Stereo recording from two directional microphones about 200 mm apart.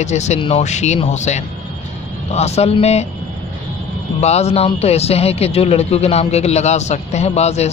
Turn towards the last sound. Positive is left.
turn(degrees=35)  # may be behind; listen again after turning